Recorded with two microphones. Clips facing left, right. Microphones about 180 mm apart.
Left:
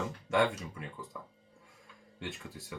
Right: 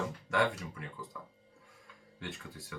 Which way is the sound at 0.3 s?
25° left (ahead or behind).